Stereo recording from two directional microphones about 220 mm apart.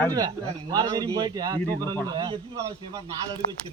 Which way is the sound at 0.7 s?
15° right (ahead or behind).